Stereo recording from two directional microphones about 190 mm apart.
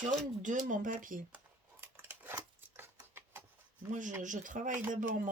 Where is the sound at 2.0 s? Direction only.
10° right (ahead or behind).